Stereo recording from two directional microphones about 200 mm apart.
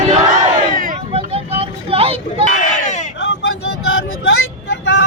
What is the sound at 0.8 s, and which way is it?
Vehicle, 35° right (ahead or behind).